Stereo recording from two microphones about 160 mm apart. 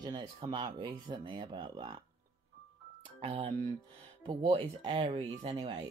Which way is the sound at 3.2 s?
40° right (ahead or behind).